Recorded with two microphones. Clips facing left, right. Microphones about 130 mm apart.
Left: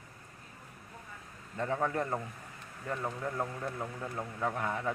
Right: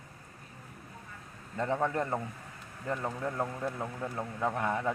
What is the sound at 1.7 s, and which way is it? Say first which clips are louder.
Speech: right 1 dB; 20° right (ahead or behind).